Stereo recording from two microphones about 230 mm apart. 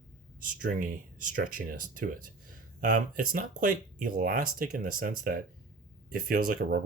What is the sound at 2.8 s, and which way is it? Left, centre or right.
Speech, right.